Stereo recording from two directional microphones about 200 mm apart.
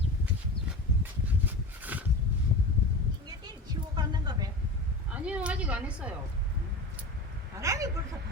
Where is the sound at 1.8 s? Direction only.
10° right (ahead or behind).